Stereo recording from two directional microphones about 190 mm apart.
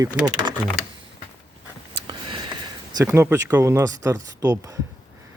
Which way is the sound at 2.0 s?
25° right (ahead or behind).